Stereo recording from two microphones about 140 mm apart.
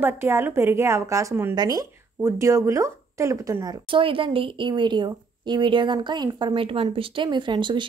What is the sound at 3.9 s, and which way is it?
A woman's voice, 40° right (ahead or behind).